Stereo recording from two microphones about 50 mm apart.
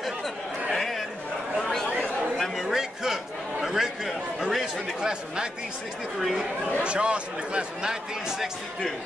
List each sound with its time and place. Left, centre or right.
0.7 s chatter: centre
1.6 s a sound: centre
3.6 s chatter: centre
6.1 s speech: centre
6.8 s speech: right